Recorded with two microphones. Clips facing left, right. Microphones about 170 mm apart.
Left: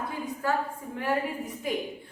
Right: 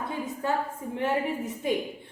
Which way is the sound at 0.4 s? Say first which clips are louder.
Even; 25° right (ahead or behind).